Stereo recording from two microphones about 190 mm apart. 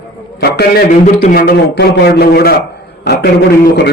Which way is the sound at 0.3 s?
55° left (ahead or behind).